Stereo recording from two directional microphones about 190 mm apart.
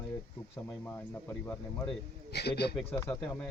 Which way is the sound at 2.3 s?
60° left (ahead or behind).